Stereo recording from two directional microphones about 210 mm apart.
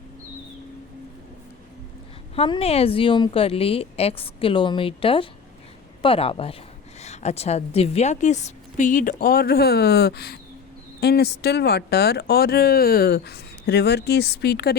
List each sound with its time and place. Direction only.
2.3 s a woman's voice: 25° left (ahead or behind); by 14.8 s 50° left (ahead or behind)